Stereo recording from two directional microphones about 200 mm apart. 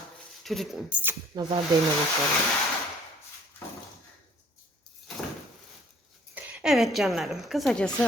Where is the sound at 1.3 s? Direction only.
20° right (ahead or behind).